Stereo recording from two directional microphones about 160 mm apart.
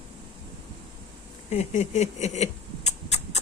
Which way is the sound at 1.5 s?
45° left (ahead or behind).